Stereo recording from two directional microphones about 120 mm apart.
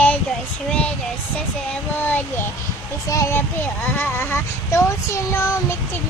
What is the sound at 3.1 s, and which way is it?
Speech, 20° left (ahead or behind).